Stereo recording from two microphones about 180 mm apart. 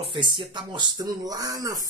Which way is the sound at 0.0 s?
30° right (ahead or behind).